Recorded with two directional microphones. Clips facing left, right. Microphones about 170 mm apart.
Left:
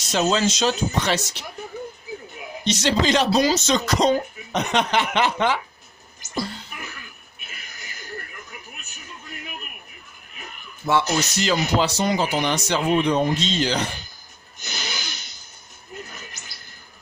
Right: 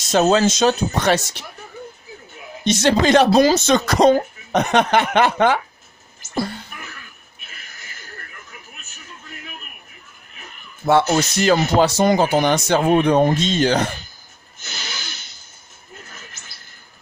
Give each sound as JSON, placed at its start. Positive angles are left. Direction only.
{"t": 0.4, "sound": "speech", "side_deg": -50}
{"t": 2.6, "sound": "speech", "side_deg": -50}
{"t": 10.8, "sound": "speech", "side_deg": -50}
{"t": 11.1, "sound": "rapping", "side_deg": -55}
{"t": 11.5, "sound": "speech", "side_deg": -50}
{"t": 14.6, "sound": "a sound", "side_deg": 0}